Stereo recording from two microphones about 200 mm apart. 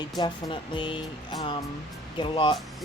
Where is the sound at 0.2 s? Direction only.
20° left (ahead or behind).